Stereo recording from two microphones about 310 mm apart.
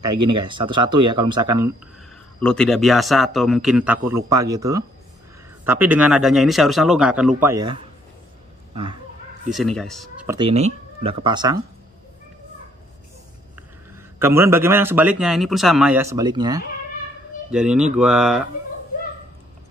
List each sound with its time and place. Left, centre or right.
0.1 s a man's voice: centre
1.0 s speech: right
2.4 s a man's voice: centre
9.5 s a man's voice: centre
14.2 s a man's voice: centre
17.5 s speech: centre